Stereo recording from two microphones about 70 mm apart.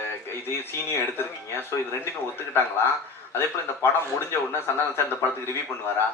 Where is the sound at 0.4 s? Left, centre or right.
Left.